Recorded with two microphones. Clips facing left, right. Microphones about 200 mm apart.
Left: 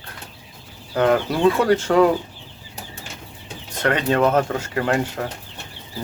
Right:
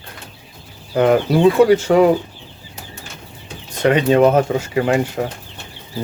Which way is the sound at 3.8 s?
15° right (ahead or behind).